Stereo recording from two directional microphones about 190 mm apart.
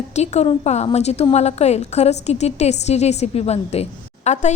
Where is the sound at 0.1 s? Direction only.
35° left (ahead or behind).